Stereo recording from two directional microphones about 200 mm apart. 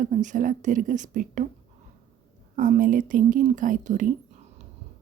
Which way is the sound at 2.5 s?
40° right (ahead or behind).